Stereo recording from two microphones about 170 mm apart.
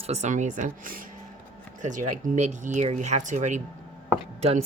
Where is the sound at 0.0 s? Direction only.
40° right (ahead or behind).